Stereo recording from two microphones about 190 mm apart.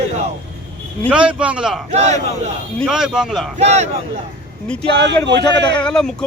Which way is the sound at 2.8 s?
5° right (ahead or behind).